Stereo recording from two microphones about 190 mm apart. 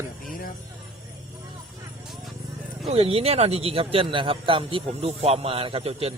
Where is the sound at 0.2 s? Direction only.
50° left (ahead or behind).